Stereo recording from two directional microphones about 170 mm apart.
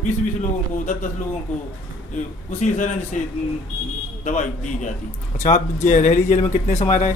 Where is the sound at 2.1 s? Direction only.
45° left (ahead or behind).